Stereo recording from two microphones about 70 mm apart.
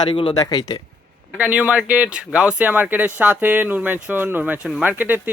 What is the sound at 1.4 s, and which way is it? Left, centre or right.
Speech, right.